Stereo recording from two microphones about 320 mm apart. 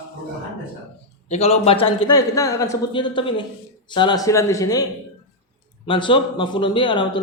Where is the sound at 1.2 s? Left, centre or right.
Centre.